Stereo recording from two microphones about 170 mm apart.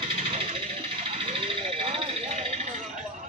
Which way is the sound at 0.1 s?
35° right (ahead or behind).